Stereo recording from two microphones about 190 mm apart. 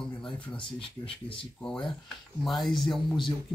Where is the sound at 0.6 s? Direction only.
30° left (ahead or behind).